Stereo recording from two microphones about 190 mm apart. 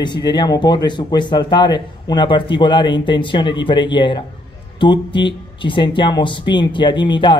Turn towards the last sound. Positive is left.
turn(degrees=25)  # may be behind; listen again after turning